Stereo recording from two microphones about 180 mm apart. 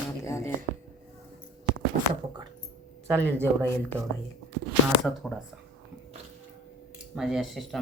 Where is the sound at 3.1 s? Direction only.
10° left (ahead or behind).